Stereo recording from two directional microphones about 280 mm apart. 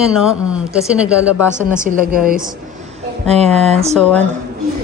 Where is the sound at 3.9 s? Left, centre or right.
Centre.